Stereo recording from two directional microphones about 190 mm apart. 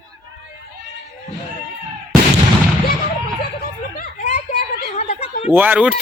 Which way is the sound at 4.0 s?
50° left (ahead or behind).